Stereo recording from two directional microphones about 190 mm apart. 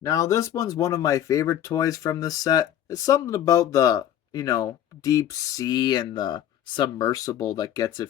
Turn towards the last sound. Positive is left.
turn(degrees=20)  # may be behind; listen again after turning